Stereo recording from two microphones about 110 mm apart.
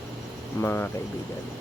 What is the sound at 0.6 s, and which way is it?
Speech, 20° left (ahead or behind).